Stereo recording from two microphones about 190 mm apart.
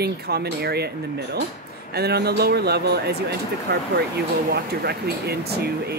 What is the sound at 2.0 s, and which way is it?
Speech, 55° right (ahead or behind).